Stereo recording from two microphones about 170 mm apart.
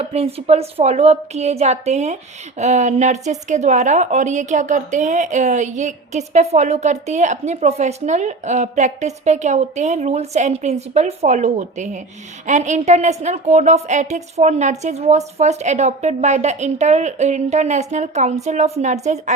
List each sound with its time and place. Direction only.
0.0 s a woman's voice: 35° right (ahead or behind)